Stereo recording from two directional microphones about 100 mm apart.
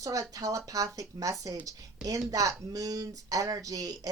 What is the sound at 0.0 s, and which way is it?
A woman's voice, 35° right (ahead or behind).